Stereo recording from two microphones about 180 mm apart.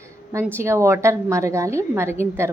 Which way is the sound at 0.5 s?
15° right (ahead or behind).